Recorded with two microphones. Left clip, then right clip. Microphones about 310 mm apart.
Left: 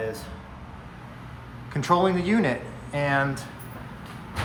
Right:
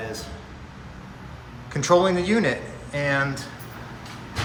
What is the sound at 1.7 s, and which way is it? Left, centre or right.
Speech, centre.